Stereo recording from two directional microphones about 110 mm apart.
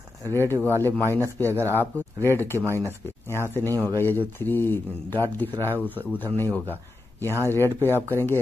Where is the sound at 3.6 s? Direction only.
30° right (ahead or behind).